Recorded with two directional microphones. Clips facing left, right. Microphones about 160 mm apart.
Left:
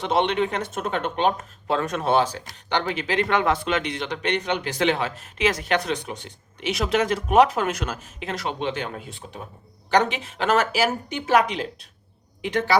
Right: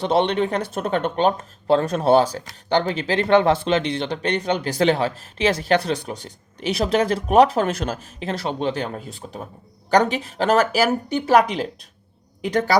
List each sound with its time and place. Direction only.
0.0 s a woman's voice: 35° right (ahead or behind)